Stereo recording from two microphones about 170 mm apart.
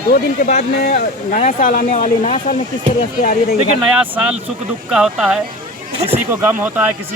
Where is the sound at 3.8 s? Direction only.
10° right (ahead or behind).